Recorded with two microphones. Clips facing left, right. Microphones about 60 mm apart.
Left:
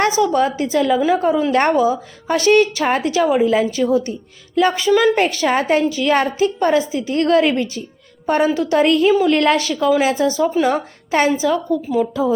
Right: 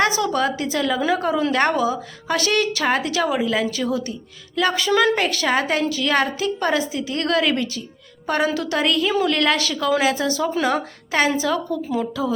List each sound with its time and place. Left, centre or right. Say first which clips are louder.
0.0 s a woman's voice: left 4 dB; left
4.9 s a woman's voice: left 3 dB; centre
5.1 s a woman's voice: left 4 dB; left
11.4 s a woman's voice: left 4 dB; centre